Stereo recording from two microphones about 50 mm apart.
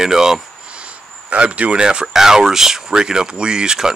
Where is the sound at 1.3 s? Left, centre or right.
Right.